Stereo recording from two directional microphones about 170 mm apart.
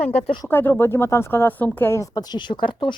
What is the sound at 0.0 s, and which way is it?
Speech, 35° left (ahead or behind).